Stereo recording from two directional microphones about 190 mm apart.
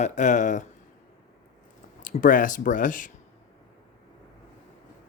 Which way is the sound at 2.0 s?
45° left (ahead or behind).